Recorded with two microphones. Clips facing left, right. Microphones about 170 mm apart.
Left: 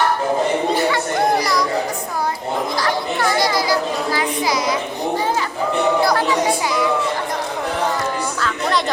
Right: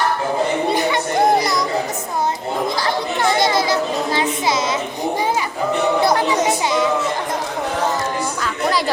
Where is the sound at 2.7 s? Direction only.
25° right (ahead or behind).